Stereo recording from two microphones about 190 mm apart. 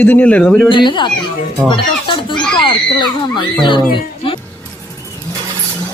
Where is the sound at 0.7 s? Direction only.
25° left (ahead or behind).